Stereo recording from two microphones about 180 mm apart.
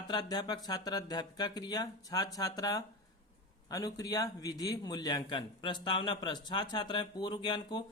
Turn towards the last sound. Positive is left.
turn(degrees=25)  # may be behind; listen again after turning